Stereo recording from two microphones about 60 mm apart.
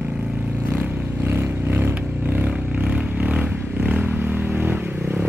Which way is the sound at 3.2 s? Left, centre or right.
Centre.